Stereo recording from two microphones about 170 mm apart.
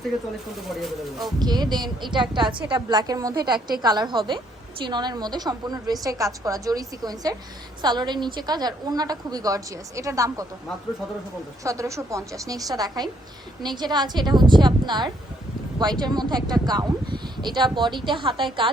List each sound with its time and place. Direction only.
1.2 s a woman's voice: 25° right (ahead or behind)
11.6 s a woman's voice: 20° right (ahead or behind)